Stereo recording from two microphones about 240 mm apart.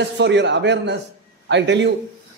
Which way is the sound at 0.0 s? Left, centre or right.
Right.